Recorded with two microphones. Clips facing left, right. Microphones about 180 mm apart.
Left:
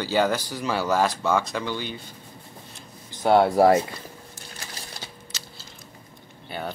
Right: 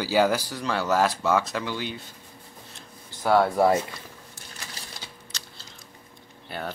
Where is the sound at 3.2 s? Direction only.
25° left (ahead or behind).